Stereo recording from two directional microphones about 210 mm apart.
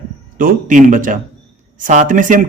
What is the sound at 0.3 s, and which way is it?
A man's voice, 40° right (ahead or behind).